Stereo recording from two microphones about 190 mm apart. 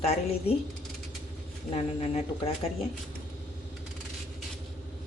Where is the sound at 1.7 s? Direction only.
35° left (ahead or behind).